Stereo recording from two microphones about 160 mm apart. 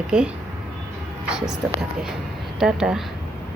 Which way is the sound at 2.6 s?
5° right (ahead or behind).